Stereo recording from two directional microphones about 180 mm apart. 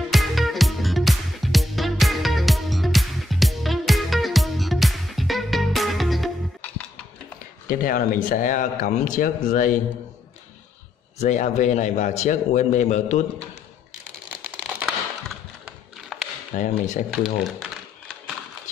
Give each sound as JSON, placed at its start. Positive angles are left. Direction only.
{"t": 0.1, "sound": "music", "side_deg": 0}
{"t": 7.6, "sound": "a man's voice", "side_deg": 50}
{"t": 11.1, "sound": "a man's voice", "side_deg": 40}
{"t": 14.4, "sound": "a sound", "side_deg": -10}
{"t": 16.5, "sound": "a man's voice", "side_deg": 45}
{"t": 17.1, "sound": "a sound", "side_deg": 0}